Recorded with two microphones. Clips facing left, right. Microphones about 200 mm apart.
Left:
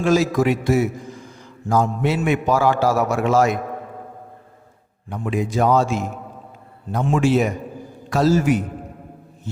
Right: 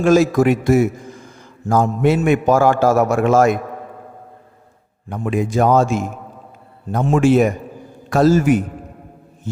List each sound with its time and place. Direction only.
0.0 s a man's voice: 50° right (ahead or behind)
5.0 s a man's voice: 50° right (ahead or behind)